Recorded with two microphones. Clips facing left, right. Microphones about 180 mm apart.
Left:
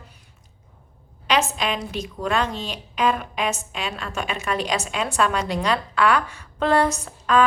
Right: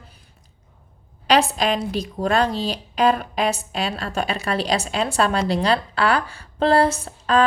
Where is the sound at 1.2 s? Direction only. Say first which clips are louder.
Right 4 dB; 35° right (ahead or behind).